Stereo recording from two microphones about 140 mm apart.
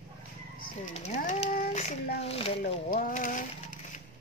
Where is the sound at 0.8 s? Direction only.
65° left (ahead or behind); by 2.7 s 45° left (ahead or behind).